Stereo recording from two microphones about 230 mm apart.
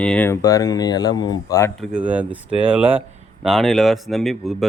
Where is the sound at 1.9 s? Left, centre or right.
Centre.